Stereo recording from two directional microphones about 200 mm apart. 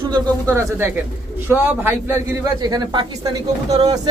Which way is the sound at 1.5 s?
10° right (ahead or behind).